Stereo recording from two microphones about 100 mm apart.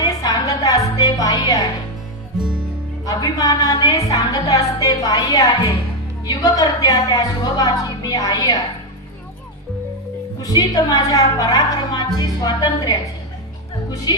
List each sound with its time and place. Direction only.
0.0 s music: 40° left (ahead or behind)
3.1 s a woman's voice: 40° left (ahead or behind)
10.4 s a woman's voice: 40° left (ahead or behind)